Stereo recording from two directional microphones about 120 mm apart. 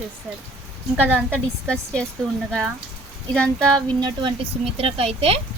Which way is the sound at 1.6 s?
5° left (ahead or behind).